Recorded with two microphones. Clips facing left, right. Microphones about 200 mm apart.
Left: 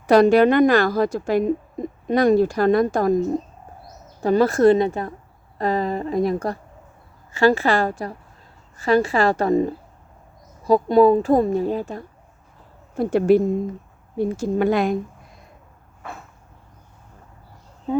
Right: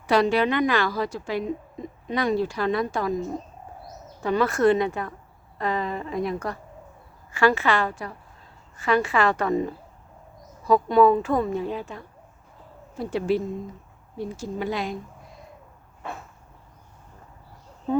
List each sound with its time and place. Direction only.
0.1 s a woman's voice: 45° left (ahead or behind)